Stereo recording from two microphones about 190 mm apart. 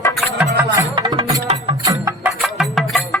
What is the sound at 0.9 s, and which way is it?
Music, 25° right (ahead or behind).